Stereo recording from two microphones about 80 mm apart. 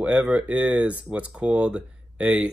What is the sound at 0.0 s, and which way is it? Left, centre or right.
Speech, centre.